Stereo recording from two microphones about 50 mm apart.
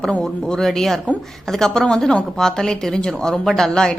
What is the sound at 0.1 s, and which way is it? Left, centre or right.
A woman's voice, centre.